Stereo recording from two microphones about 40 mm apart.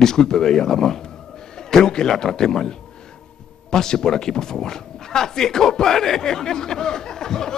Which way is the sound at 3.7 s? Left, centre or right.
Centre.